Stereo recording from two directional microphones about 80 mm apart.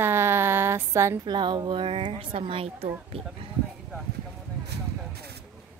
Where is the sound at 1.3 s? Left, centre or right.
Right.